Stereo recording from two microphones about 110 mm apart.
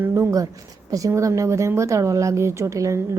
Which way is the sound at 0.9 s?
30° right (ahead or behind).